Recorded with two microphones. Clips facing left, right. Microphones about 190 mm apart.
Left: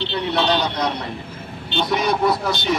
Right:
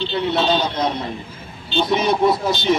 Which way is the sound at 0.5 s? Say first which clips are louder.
Right 1 dB; 20° right (ahead or behind).